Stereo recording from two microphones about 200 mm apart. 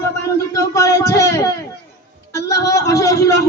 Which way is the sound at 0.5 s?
15° left (ahead or behind).